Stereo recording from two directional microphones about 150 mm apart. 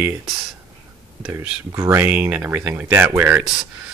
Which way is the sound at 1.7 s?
20° right (ahead or behind).